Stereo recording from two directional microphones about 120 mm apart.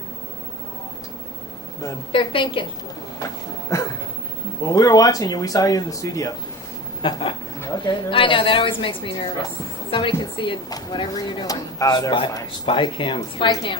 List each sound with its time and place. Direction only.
2.1 s a woman's voice: 45° left (ahead or behind)
3.2 s a sound: 25° left (ahead or behind)
4.6 s a woman's voice: 30° left (ahead or behind)
7.0 s a woman's voice: 45° left (ahead or behind)